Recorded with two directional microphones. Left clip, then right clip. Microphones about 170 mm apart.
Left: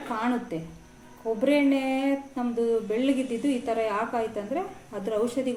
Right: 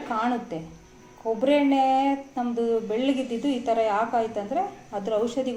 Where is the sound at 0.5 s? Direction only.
15° left (ahead or behind).